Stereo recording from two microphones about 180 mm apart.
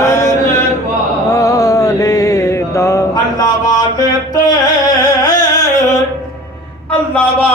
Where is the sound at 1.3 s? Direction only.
20° left (ahead or behind).